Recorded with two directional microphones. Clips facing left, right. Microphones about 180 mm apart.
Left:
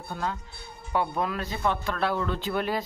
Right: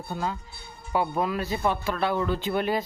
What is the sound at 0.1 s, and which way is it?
Speech, 5° right (ahead or behind).